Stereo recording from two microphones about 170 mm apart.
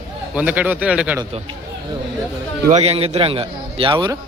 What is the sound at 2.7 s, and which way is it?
A man's voice, 35° right (ahead or behind).